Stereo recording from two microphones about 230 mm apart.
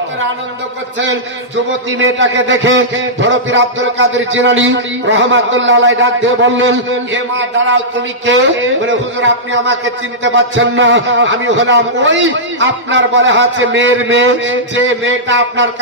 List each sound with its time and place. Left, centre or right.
2.0 s a man's voice: right
8.3 s a man's voice: right